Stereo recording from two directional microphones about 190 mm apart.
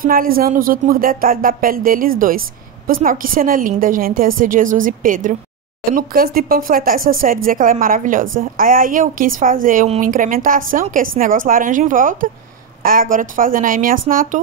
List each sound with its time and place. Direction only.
0.0 s a woman's voice: 50° right (ahead or behind)